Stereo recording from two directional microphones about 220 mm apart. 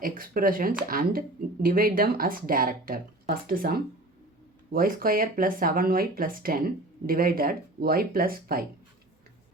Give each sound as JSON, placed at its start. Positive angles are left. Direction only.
{"t": 0.0, "sound": "speech", "side_deg": -40}